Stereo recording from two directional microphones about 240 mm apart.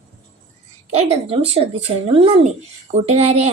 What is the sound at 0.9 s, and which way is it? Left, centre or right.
A woman's voice, right.